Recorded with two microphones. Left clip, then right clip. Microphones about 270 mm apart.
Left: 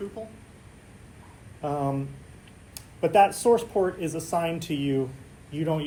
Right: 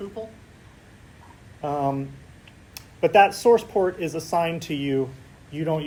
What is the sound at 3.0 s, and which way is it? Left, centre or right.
Speech, centre.